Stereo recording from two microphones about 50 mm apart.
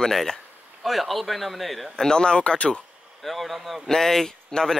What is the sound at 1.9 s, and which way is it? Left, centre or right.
Speech, centre.